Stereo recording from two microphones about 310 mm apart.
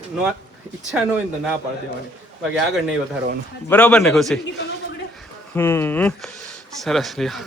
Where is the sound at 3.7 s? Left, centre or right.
Centre.